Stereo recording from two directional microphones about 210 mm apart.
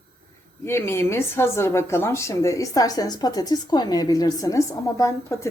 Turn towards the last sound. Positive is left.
turn(degrees=15)  # may be behind; listen again after turning